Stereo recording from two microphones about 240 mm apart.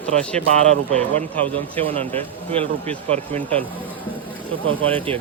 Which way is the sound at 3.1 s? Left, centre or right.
Right.